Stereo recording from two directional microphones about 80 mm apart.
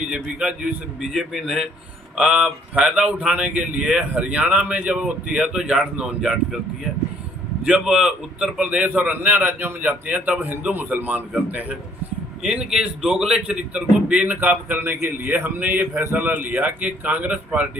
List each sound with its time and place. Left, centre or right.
0.1 s a man's voice: centre
7.6 s a man's voice: centre